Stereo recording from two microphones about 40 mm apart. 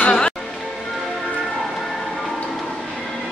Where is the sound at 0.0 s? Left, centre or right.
Left.